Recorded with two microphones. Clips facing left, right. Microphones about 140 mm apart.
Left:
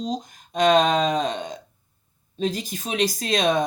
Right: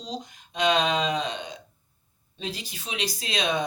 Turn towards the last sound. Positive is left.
turn(degrees=45)  # may be behind; listen again after turning